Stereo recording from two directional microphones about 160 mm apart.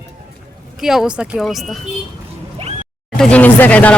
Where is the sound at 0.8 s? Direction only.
5° right (ahead or behind).